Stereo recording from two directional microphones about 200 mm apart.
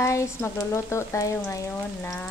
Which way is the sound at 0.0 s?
15° left (ahead or behind).